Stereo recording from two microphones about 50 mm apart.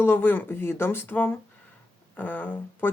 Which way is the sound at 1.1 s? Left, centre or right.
Left.